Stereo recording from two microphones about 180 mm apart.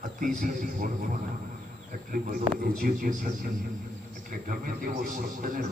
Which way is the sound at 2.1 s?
50° right (ahead or behind).